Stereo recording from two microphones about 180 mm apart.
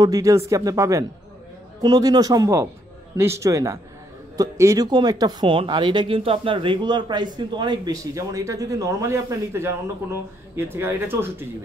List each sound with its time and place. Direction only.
0.0 s speech: 20° right (ahead or behind)